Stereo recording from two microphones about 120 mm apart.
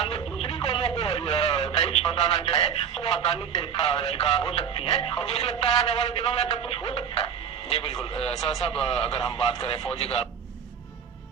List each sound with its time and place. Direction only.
0.0 s radio: 55° left (ahead or behind)
3.8 s speech: 55° left (ahead or behind)